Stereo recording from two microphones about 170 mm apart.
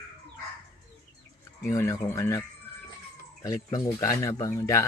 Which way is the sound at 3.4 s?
20° left (ahead or behind).